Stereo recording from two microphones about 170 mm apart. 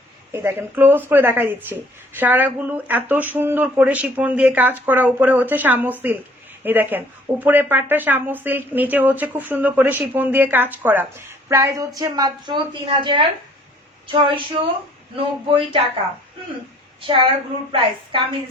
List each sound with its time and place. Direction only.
0.3 s a woman's voice: 15° right (ahead or behind); by 15.8 s 30° right (ahead or behind)
17.7 s a woman's voice: 30° right (ahead or behind)